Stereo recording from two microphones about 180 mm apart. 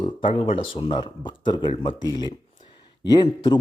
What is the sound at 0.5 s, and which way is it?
Speech, 30° left (ahead or behind).